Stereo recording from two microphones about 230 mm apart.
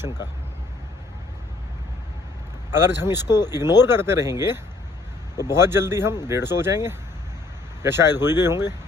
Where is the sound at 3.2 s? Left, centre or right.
Centre.